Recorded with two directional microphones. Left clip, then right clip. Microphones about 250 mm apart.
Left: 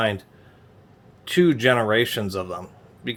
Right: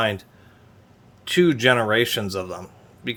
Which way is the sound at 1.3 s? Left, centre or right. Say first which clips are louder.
Right 1 dB; centre.